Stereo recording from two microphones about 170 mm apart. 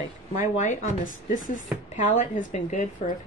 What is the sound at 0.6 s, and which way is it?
Speech, 45° left (ahead or behind).